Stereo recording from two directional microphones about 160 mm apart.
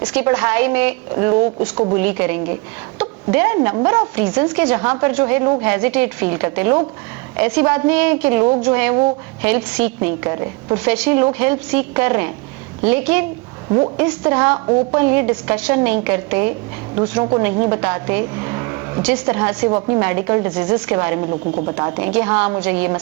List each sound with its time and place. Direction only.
0.0 s a woman's voice: 10° right (ahead or behind)
10.8 s a woman's voice: 5° right (ahead or behind)
13.7 s a woman's voice: 30° right (ahead or behind)
13.9 s a woman's voice: 10° right (ahead or behind)
19.0 s a woman's voice: 5° right (ahead or behind)
21.2 s speech: 35° right (ahead or behind)
21.8 s a woman's voice: 15° right (ahead or behind)